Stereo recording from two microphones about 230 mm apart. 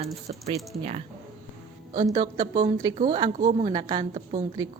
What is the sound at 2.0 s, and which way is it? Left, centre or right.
A woman's voice, centre.